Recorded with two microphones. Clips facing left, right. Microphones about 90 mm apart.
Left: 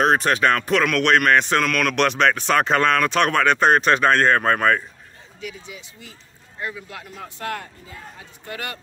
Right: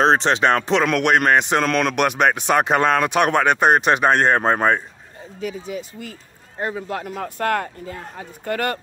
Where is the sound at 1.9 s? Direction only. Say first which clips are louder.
Right 1 dB; 15° right (ahead or behind).